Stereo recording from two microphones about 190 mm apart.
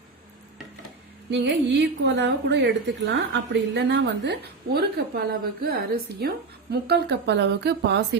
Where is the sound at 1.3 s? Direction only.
65° right (ahead or behind).